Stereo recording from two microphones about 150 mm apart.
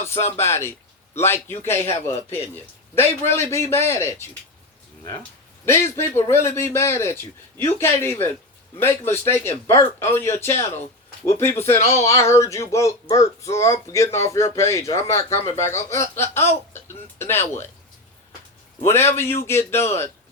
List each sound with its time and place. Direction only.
0.3 s a man's voice: 15° left (ahead or behind)
5.6 s a man's voice: 15° left (ahead or behind)
18.9 s a man's voice: 15° left (ahead or behind)